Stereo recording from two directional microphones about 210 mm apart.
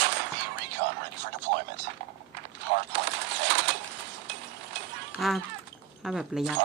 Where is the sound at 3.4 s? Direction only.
55° right (ahead or behind).